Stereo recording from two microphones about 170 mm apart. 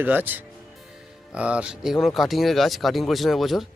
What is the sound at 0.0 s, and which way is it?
Speech, 10° right (ahead or behind).